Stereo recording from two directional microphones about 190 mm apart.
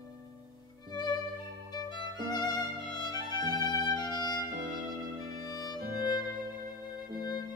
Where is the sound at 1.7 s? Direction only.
20° left (ahead or behind).